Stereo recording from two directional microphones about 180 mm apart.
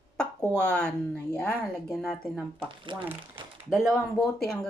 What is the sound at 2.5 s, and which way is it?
Speech, 25° right (ahead or behind).